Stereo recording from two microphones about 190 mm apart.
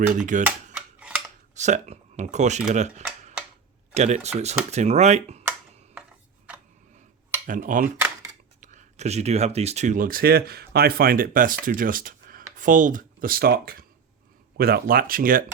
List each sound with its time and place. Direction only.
0.1 s speech: 40° right (ahead or behind)
0.9 s scissors: 5° right (ahead or behind)
1.5 s speech: 40° right (ahead or behind)
2.7 s cutlery: 35° right (ahead or behind)
3.9 s speech: 35° right (ahead or behind)
5.4 s a sound: 10° right (ahead or behind)
7.4 s speech: 45° right (ahead or behind)